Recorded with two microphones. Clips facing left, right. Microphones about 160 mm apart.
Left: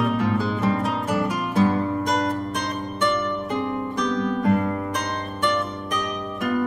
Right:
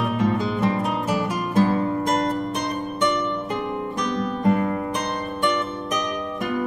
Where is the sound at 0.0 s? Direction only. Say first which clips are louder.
Even; 5° left (ahead or behind).